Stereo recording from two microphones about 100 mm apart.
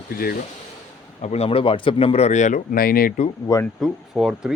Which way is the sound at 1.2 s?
90° left.